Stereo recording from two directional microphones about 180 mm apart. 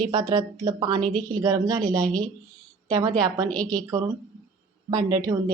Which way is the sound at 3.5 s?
5° left (ahead or behind).